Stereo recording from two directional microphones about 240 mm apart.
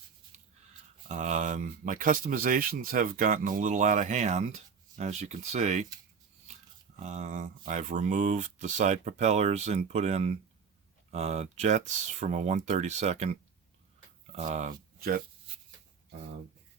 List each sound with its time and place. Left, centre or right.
1.0 s speech: right
7.0 s speech: right
14.3 s speech: right